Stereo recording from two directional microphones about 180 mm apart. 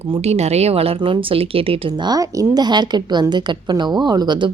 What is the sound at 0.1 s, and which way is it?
A woman's voice, 35° right (ahead or behind).